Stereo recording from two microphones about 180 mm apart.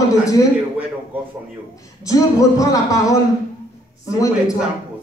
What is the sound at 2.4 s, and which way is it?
Speech, 20° left (ahead or behind).